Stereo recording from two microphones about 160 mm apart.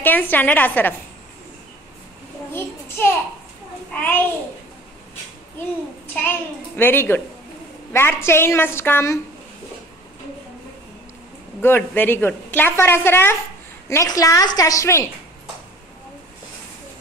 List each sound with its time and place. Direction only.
0.0 s a woman's voice: 10° left (ahead or behind)
2.5 s a sound: 15° left (ahead or behind)
3.9 s a child's voice: 10° left (ahead or behind)
6.8 s a woman's voice: 15° left (ahead or behind)
11.6 s a woman's voice: 15° left (ahead or behind)